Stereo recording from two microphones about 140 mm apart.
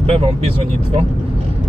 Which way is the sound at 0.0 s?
45° right (ahead or behind).